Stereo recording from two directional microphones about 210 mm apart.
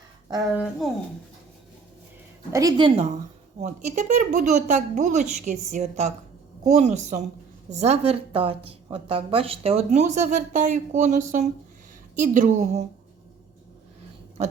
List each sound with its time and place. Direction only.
0.5 s speech: 5° right (ahead or behind)
2.5 s a woman's voice: 15° right (ahead or behind); by 12.8 s 35° right (ahead or behind)